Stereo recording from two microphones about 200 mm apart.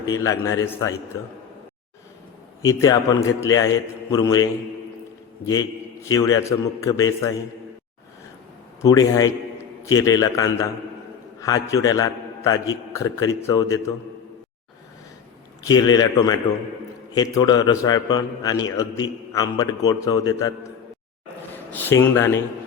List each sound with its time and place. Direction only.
0.1 s a man's voice: 15° left (ahead or behind)
2.6 s a man's voice: 15° left (ahead or behind)
5.5 s a man's voice: 20° left (ahead or behind)
8.8 s a man's voice: 15° left (ahead or behind)
15.6 s a man's voice: 20° left (ahead or behind)